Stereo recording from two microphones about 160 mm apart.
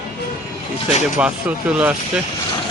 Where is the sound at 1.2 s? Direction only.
5° right (ahead or behind).